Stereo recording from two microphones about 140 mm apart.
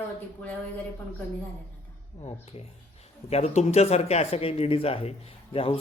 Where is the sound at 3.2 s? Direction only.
50° left (ahead or behind).